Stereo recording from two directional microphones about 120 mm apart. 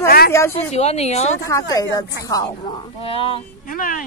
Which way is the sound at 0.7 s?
65° left (ahead or behind).